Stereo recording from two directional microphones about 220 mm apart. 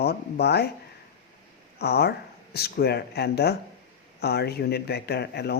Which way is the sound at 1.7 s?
45° left (ahead or behind).